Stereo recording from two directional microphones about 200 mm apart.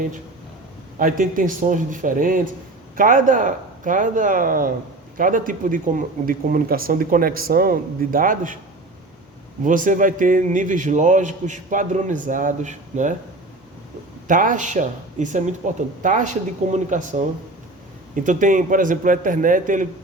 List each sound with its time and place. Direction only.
0.9 s a man's voice: 40° right (ahead or behind)
9.6 s a man's voice: 40° right (ahead or behind)
14.3 s a man's voice: 40° right (ahead or behind)